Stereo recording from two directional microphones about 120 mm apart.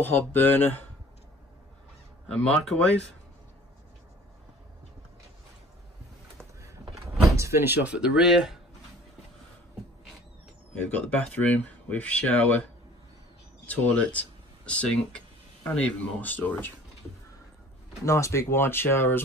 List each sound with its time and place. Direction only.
0.0 s speech: 15° left (ahead or behind)
2.2 s speech: 5° left (ahead or behind)
7.3 s speech: 20° right (ahead or behind); by 8.5 s 5° right (ahead or behind)
10.7 s speech: 10° left (ahead or behind)
13.7 s speech: 10° left (ahead or behind)
18.0 s speech: 25° left (ahead or behind)